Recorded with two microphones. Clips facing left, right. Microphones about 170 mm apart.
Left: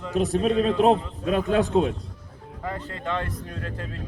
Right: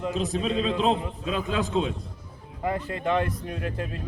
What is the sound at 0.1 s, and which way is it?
A man's voice, 65° left (ahead or behind).